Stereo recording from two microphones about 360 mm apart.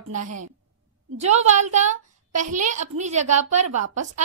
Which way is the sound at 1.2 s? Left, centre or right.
Centre.